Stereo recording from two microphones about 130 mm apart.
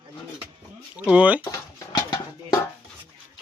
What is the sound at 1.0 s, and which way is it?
Speech, 10° right (ahead or behind).